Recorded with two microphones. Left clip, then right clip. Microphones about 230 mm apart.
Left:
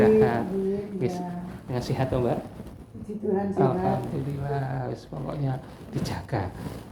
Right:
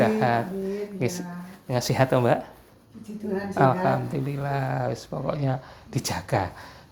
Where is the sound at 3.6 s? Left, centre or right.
Right.